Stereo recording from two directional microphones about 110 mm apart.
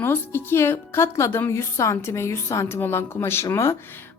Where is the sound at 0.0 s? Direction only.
20° left (ahead or behind).